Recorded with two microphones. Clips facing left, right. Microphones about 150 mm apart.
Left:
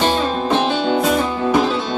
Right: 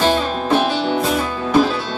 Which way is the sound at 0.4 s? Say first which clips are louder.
Even; 20° left (ahead or behind).